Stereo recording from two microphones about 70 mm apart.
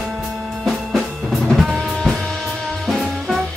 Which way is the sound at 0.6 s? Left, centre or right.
Centre.